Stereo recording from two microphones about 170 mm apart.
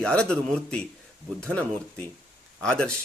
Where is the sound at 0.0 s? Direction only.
5° left (ahead or behind).